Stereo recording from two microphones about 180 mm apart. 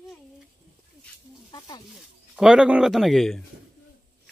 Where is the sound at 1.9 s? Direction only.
5° right (ahead or behind).